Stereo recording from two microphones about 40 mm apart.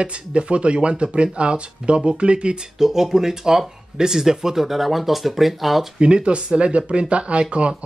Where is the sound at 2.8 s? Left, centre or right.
Centre.